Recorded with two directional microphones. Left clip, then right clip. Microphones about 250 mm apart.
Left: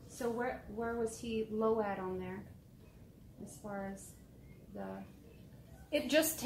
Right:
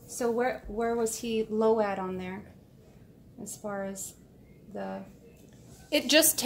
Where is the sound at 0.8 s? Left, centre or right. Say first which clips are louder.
Right 9 dB; centre.